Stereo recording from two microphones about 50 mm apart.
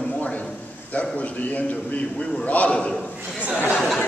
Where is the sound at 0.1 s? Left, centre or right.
Left.